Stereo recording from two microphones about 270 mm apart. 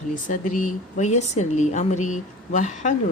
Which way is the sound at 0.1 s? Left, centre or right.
Left.